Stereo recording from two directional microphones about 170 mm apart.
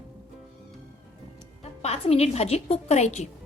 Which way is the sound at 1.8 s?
35° left (ahead or behind).